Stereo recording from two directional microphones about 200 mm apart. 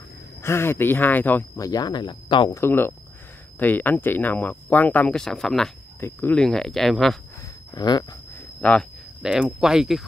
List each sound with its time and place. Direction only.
0.4 s speech: 10° left (ahead or behind)
2.6 s speech: 10° left (ahead or behind)
7.7 s speech: 20° left (ahead or behind)
8.5 s speech: 5° left (ahead or behind)